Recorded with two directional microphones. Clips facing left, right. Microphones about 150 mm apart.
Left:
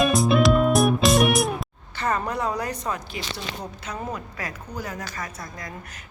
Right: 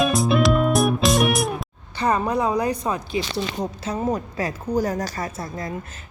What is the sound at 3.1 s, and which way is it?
A woman's voice, 25° right (ahead or behind).